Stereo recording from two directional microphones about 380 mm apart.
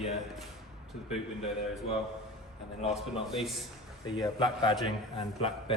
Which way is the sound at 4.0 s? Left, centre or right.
Centre.